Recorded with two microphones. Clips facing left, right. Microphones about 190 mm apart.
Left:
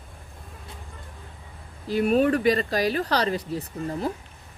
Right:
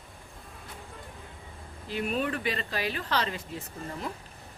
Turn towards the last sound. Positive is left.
turn(degrees=35)  # may be behind; listen again after turning